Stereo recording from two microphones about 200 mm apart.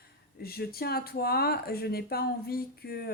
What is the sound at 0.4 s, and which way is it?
Speech, 50° left (ahead or behind).